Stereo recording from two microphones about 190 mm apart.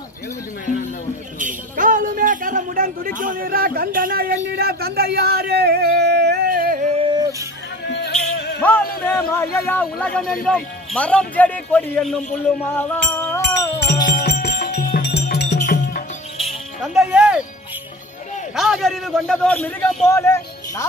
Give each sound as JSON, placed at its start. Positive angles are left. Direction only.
{"t": 1.4, "sound": "speech", "side_deg": -45}
{"t": 6.9, "sound": "a sound", "side_deg": -25}
{"t": 8.5, "sound": "music", "side_deg": 10}
{"t": 9.0, "sound": "speech", "side_deg": 15}
{"t": 13.9, "sound": "music", "side_deg": 20}
{"t": 14.2, "sound": "music", "side_deg": 50}
{"t": 16.3, "sound": "music", "side_deg": 0}
{"t": 18.6, "sound": "a man's voice", "side_deg": 0}